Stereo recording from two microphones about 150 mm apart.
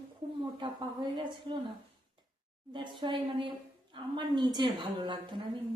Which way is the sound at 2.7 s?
30° right (ahead or behind).